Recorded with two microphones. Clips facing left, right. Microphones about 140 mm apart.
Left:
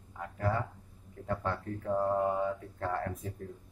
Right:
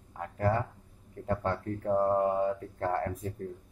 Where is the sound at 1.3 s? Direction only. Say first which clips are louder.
Right 3 dB; 40° right (ahead or behind).